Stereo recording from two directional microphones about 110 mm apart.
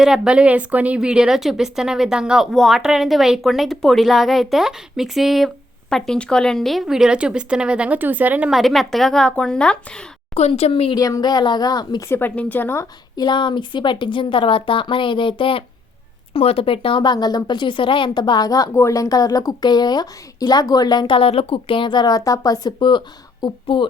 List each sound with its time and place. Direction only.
0.0 s a woman's voice: 5° right (ahead or behind)
8.4 s a woman's voice: centre (ahead or behind)
10.3 s speech: 75° left (ahead or behind)
10.9 s speech: 35° left (ahead or behind)
12.0 s a woman's voice: 20° left (ahead or behind)
13.1 s a woman's voice: 45° left (ahead or behind)
21.2 s a woman's voice: 60° left (ahead or behind)